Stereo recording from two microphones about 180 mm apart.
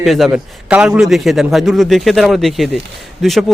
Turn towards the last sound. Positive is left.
turn(degrees=0)  # may be behind; listen again after turning